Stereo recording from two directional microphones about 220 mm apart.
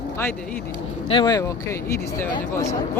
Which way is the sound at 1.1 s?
20° left (ahead or behind).